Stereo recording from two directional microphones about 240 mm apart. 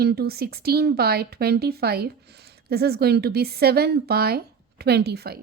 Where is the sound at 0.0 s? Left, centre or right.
Right.